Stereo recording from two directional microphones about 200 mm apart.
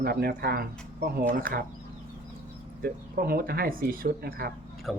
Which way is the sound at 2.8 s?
50° right (ahead or behind).